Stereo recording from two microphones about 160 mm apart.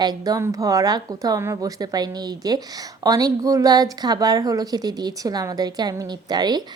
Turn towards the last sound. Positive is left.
turn(degrees=-25)  # may be behind; listen again after turning